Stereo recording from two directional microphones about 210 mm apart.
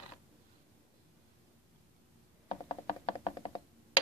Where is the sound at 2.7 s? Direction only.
30° left (ahead or behind).